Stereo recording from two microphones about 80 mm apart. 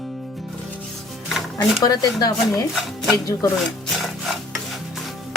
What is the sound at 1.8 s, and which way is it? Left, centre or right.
Speech, left.